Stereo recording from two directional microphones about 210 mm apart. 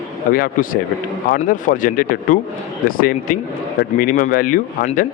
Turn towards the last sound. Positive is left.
turn(degrees=40)  # may be behind; listen again after turning